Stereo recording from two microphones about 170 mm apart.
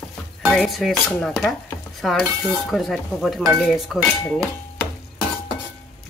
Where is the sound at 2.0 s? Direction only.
Centre (ahead or behind).